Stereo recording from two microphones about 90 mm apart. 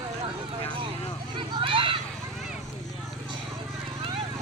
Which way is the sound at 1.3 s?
70° right (ahead or behind).